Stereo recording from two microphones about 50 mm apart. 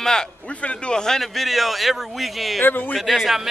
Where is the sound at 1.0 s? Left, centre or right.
Centre.